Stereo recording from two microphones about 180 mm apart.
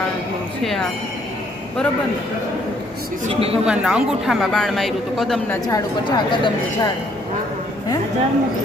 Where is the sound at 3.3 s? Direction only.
35° right (ahead or behind).